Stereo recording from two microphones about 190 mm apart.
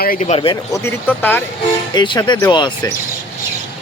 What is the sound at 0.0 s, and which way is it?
Speech, 45° left (ahead or behind).